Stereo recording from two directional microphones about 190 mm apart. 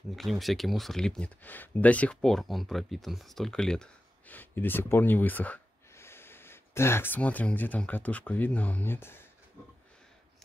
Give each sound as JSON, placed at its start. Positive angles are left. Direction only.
{"t": 0.1, "sound": "speech", "side_deg": 0}